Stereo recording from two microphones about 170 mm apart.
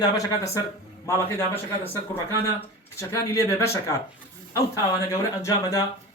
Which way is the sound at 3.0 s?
15° left (ahead or behind).